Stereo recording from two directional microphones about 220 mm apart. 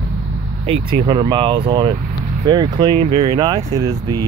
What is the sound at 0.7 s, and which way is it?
Speech, 20° right (ahead or behind).